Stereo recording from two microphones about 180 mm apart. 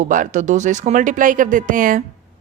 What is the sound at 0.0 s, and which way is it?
A woman's voice, 45° right (ahead or behind).